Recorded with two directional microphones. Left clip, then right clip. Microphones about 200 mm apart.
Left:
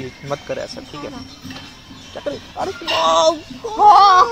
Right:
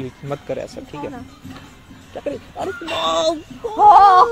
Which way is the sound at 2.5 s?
50° right (ahead or behind).